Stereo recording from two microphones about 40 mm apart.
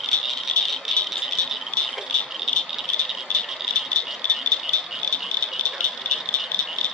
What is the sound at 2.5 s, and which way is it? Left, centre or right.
Rattle, centre.